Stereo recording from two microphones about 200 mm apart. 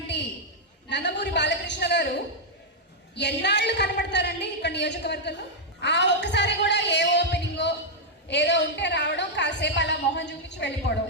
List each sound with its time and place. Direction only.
0.9 s a woman's voice: 60° left (ahead or behind)
3.2 s a woman's voice: 60° left (ahead or behind)
5.8 s a sound: 60° left (ahead or behind)
8.3 s a woman's voice: 60° left (ahead or behind)